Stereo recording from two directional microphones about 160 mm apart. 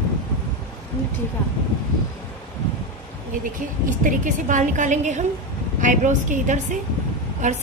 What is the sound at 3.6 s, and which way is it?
A woman's voice, 55° right (ahead or behind).